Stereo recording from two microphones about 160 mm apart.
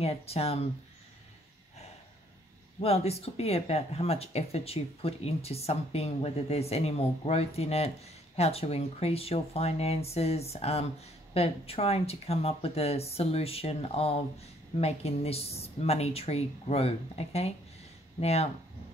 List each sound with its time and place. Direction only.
0.0 s speech: 40° left (ahead or behind)
2.8 s speech: 40° left (ahead or behind)